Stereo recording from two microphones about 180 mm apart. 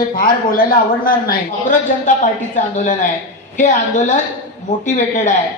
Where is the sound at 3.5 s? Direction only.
45° left (ahead or behind).